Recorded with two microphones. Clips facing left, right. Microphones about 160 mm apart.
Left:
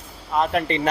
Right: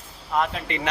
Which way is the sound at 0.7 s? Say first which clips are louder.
Left 6 dB; 35° left (ahead or behind).